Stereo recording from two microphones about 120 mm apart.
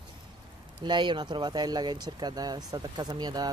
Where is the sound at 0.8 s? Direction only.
40° right (ahead or behind).